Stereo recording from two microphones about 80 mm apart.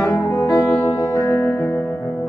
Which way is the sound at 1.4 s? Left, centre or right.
Left.